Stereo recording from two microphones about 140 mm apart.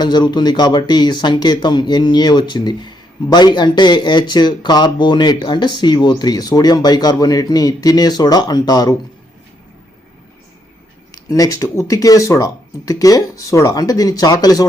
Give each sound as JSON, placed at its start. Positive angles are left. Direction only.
{"t": 0.0, "sound": "speech", "side_deg": 30}
{"t": 11.1, "sound": "speech", "side_deg": 25}